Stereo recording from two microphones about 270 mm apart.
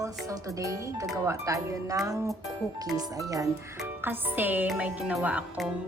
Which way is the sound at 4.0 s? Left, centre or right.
Centre.